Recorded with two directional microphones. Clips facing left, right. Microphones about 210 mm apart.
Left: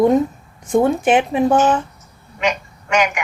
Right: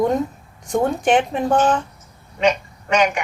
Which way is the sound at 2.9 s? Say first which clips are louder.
Even; 30° right (ahead or behind).